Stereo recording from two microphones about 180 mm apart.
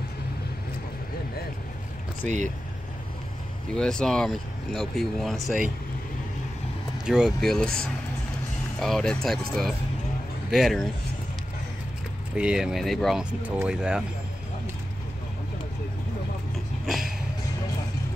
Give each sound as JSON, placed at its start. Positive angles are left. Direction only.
{"t": 2.2, "sound": "speech", "side_deg": -40}
{"t": 3.7, "sound": "speech", "side_deg": 5}
{"t": 7.1, "sound": "speech", "side_deg": -5}
{"t": 12.4, "sound": "speech", "side_deg": -5}
{"t": 16.8, "sound": "a sound", "side_deg": 0}